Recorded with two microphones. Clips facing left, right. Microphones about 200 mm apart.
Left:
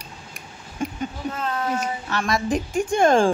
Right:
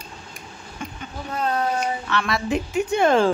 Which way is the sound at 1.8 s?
45° left (ahead or behind).